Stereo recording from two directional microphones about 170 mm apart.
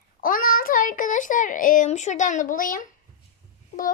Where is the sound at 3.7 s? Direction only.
45° left (ahead or behind).